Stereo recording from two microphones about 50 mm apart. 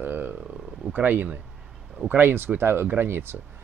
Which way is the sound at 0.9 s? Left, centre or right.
Right.